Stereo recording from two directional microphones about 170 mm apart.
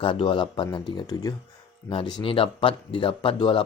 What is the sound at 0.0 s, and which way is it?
Speech, 30° left (ahead or behind).